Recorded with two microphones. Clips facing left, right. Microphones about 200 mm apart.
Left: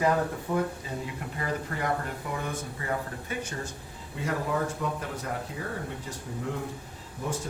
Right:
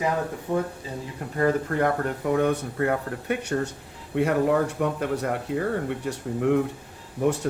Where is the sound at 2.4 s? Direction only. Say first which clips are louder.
Right 12 dB; 65° right (ahead or behind).